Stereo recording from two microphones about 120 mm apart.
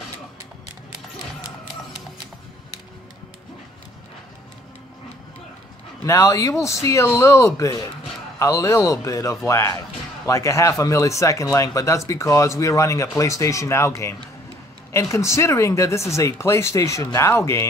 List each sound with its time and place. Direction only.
6.0 s speech: 25° left (ahead or behind)